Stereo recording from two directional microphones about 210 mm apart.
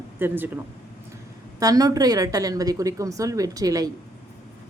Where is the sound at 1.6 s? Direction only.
15° right (ahead or behind).